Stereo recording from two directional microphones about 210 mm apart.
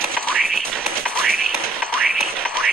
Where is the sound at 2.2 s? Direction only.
5° left (ahead or behind).